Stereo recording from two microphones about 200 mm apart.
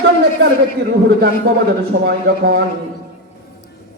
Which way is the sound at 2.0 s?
55° right (ahead or behind).